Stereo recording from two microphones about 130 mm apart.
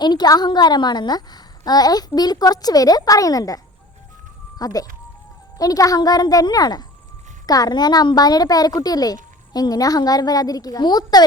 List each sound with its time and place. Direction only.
0.0 s a woman's voice: 35° left (ahead or behind)